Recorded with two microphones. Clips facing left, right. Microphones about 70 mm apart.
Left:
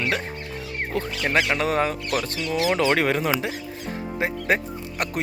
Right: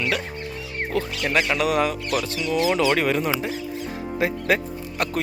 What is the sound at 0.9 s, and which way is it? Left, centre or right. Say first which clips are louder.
Music: even; left.